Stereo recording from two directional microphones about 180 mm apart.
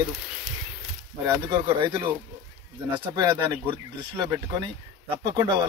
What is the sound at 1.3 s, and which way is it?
Speech, 20° right (ahead or behind).